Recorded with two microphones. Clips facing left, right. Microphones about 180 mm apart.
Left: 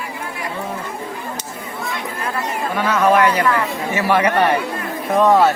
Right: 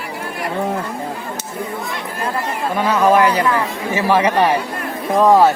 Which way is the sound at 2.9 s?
15° right (ahead or behind).